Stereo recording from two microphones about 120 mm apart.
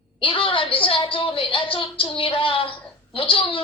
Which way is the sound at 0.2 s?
50° left (ahead or behind).